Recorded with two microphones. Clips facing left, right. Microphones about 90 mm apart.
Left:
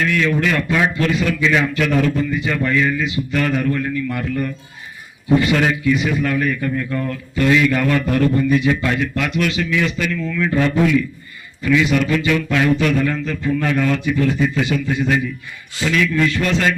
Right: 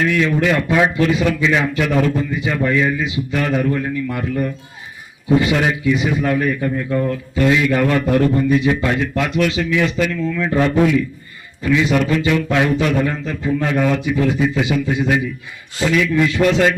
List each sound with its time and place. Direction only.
0.0 s a man's voice: 15° right (ahead or behind)